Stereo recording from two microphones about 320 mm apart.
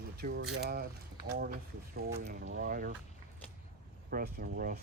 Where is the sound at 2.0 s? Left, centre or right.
Right.